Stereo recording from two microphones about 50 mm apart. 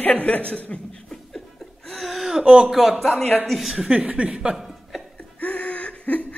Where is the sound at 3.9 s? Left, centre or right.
Right.